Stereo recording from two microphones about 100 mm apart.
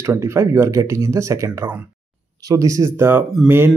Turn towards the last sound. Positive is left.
turn(degrees=-25)  # may be behind; listen again after turning